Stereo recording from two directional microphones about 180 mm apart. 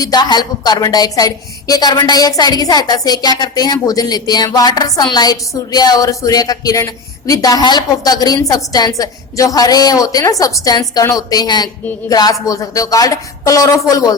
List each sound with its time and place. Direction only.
0.0 s speech: 20° left (ahead or behind)